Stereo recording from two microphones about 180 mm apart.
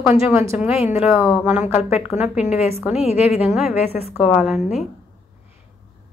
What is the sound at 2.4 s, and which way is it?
A woman's voice, 35° left (ahead or behind).